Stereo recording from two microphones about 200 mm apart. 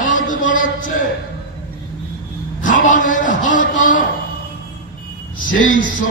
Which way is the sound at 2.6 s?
40° left (ahead or behind).